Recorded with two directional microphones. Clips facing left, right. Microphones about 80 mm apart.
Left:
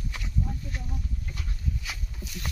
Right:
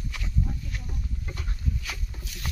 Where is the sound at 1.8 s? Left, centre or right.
Centre.